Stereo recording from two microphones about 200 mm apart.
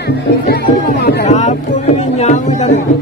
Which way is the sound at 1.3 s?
35° left (ahead or behind).